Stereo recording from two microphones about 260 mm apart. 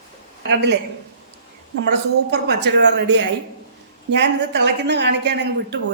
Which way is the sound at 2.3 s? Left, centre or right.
Right.